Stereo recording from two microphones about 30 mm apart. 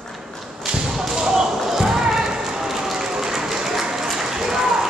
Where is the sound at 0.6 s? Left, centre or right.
Centre.